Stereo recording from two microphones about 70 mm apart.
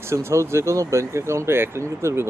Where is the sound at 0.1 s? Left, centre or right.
Right.